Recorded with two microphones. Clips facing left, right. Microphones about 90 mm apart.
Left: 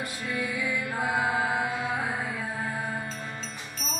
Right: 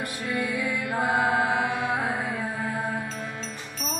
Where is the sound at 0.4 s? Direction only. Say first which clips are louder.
Right 2 dB; 60° right (ahead or behind).